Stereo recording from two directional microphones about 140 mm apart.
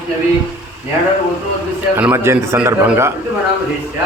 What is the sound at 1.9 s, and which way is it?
A man's voice, 15° right (ahead or behind).